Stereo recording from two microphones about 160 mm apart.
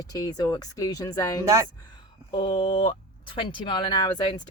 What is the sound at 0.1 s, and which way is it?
Speech, 25° left (ahead or behind).